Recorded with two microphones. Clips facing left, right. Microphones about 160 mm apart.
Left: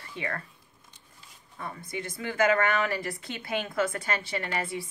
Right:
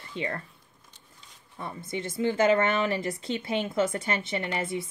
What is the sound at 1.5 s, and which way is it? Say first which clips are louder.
Speech: right 2 dB; 25° right (ahead or behind).